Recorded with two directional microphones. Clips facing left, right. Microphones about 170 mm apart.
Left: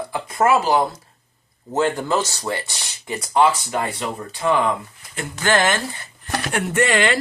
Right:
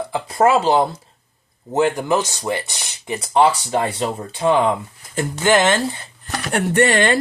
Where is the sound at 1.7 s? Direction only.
15° right (ahead or behind).